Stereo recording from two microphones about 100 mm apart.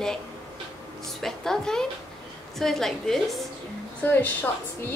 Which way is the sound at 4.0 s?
15° left (ahead or behind).